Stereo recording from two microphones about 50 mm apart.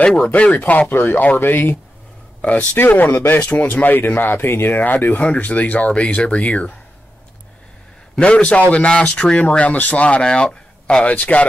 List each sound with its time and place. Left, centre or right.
0.0 s speech: left
0.7 s speech: left
2.4 s speech: left
2.8 s speech: left
3.3 s speech: left
8.2 s speech: left